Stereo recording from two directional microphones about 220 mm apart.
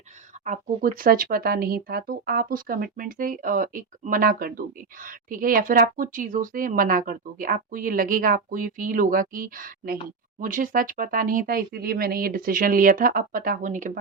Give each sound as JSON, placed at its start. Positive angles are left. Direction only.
{"t": 0.4, "sound": "speech", "side_deg": -35}